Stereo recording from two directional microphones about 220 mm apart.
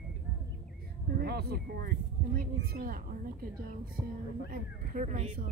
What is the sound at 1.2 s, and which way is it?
A woman's voice, 45° right (ahead or behind).